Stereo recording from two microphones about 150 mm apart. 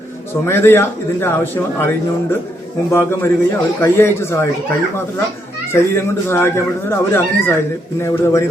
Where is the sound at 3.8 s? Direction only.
15° left (ahead or behind).